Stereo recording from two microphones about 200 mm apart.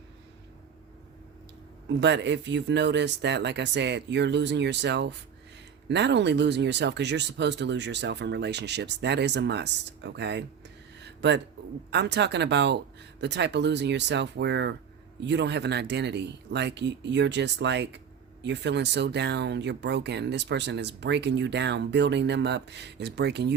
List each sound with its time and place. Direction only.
2.0 s speech: 60° right (ahead or behind)
11.0 s a sound: 60° right (ahead or behind)
11.9 s speech: 60° right (ahead or behind)